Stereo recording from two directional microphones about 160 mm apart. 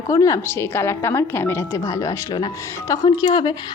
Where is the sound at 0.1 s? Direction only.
20° left (ahead or behind).